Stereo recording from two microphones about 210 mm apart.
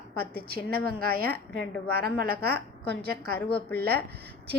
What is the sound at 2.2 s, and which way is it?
Speech, 45° right (ahead or behind).